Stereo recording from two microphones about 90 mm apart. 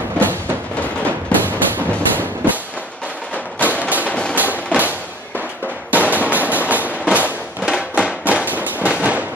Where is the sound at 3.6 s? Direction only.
20° right (ahead or behind).